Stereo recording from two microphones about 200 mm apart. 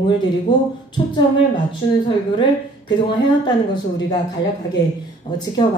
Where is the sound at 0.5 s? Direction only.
25° left (ahead or behind).